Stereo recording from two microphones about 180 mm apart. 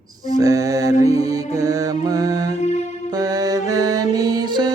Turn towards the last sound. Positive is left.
turn(degrees=-25)  # may be behind; listen again after turning